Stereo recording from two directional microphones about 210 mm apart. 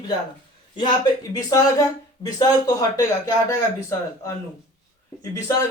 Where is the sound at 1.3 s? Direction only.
15° left (ahead or behind).